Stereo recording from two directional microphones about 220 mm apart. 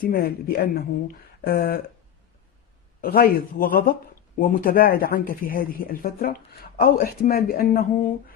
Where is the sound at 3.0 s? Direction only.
40° left (ahead or behind).